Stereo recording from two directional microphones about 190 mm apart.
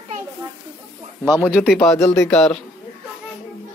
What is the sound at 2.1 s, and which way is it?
Speech, 5° left (ahead or behind).